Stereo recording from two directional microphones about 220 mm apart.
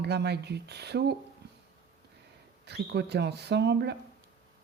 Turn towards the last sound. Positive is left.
turn(degrees=-50)  # may be behind; listen again after turning